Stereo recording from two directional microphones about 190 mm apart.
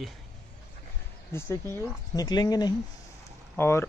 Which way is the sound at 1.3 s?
15° left (ahead or behind).